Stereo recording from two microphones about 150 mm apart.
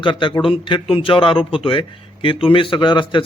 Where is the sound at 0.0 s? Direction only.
35° left (ahead or behind).